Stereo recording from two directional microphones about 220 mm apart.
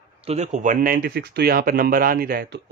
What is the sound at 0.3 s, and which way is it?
Speech, 30° right (ahead or behind).